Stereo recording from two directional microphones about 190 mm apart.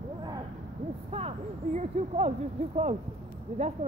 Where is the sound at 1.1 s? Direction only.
30° right (ahead or behind).